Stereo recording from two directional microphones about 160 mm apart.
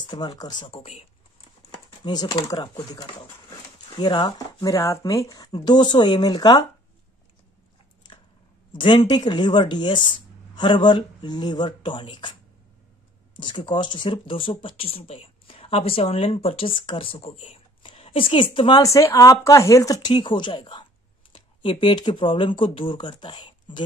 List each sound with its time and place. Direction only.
0.0 s speech: 30° left (ahead or behind)
1.7 s speech: 25° left (ahead or behind)
8.7 s speech: 30° left (ahead or behind)
13.4 s speech: 30° left (ahead or behind)